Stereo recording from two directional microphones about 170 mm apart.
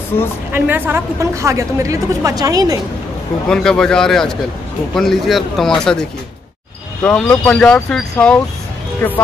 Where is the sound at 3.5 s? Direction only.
5° left (ahead or behind).